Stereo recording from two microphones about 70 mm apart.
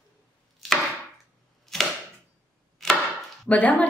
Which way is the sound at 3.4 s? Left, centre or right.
Left.